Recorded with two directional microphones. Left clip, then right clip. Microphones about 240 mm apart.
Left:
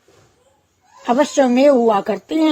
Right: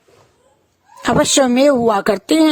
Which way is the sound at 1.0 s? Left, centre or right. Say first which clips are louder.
Right 1 dB; right.